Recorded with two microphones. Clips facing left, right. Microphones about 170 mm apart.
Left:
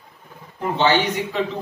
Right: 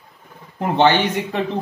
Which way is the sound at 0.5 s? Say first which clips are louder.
Right 3 dB; 60° right (ahead or behind).